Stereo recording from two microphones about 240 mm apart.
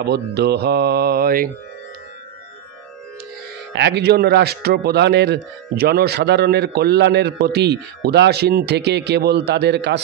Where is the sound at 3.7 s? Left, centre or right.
Right.